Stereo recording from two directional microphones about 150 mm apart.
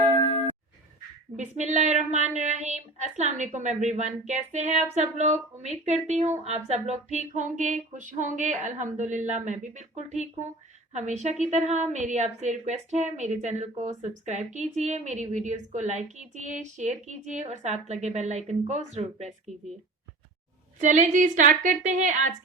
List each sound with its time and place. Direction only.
1.5 s a woman's voice: 50° right (ahead or behind)
20.8 s a woman's voice: 50° right (ahead or behind)